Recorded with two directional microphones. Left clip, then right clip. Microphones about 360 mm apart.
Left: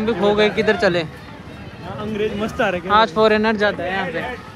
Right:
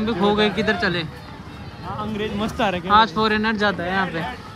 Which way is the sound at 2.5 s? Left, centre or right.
Right.